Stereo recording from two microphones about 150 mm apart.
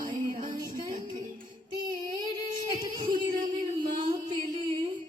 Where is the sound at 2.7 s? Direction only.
30° right (ahead or behind).